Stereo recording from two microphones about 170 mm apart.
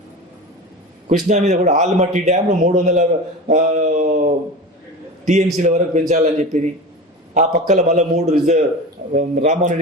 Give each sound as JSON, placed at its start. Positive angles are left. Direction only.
{"t": 1.3, "sound": "a man's voice", "side_deg": -45}